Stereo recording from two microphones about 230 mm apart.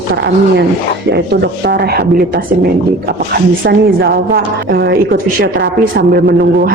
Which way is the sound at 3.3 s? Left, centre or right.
Right.